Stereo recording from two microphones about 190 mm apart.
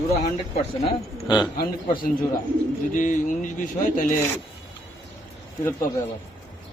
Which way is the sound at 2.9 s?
45° left (ahead or behind).